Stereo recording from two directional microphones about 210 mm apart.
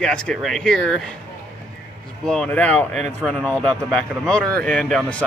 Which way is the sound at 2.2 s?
5° left (ahead or behind).